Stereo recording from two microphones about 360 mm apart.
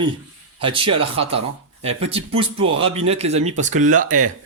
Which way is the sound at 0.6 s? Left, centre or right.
Centre.